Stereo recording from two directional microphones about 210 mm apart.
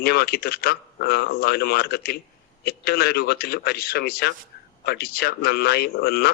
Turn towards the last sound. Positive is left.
turn(degrees=50)  # may be behind; listen again after turning